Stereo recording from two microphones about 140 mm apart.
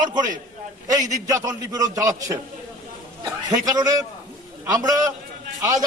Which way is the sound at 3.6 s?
25° right (ahead or behind).